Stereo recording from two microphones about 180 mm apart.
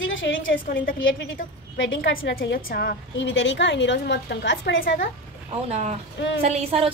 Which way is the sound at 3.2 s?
90° left.